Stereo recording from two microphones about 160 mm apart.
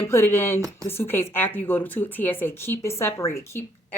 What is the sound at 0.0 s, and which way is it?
Speech, 15° left (ahead or behind).